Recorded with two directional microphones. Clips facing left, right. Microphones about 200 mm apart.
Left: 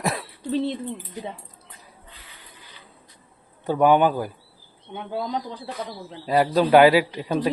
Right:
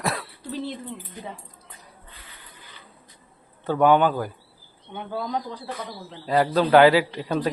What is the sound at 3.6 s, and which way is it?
A man's voice, 15° left (ahead or behind).